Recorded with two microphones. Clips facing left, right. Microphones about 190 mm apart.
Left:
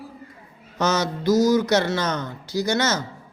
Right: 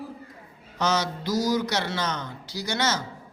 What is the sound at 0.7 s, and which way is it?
Speech, 45° left (ahead or behind).